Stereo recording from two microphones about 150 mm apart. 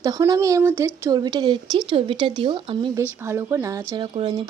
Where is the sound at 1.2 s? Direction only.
30° right (ahead or behind).